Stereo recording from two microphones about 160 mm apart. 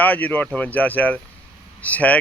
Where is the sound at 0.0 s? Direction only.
10° left (ahead or behind).